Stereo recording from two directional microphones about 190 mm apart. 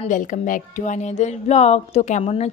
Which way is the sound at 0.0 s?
40° left (ahead or behind).